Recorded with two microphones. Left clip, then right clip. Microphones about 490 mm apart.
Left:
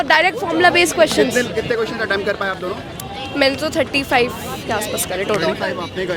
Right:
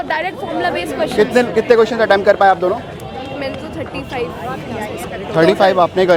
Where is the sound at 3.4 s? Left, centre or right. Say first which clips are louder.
Left 12 dB; left.